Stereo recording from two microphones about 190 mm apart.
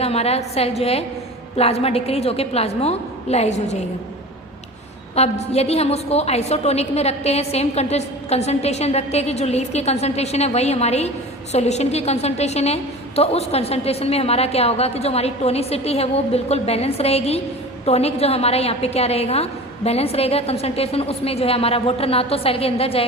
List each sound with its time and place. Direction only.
0.0 s a woman's voice: 30° left (ahead or behind)
5.1 s a woman's voice: 35° left (ahead or behind)